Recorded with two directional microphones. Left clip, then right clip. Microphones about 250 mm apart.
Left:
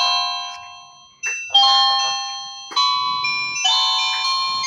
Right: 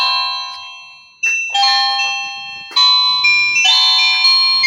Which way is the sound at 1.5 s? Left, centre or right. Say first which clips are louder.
Left 2 dB; right.